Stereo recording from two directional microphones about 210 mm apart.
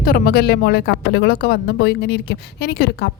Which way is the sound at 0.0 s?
45° left (ahead or behind).